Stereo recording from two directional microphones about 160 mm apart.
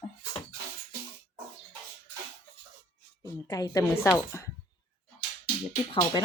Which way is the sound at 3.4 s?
20° left (ahead or behind).